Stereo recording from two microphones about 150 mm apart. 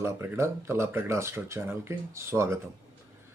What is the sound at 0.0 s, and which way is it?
Speech, 15° right (ahead or behind).